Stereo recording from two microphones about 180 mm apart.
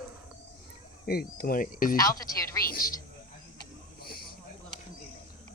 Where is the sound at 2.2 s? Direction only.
20° left (ahead or behind).